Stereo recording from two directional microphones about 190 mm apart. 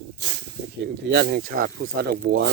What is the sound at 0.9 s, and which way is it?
Speech, 65° right (ahead or behind).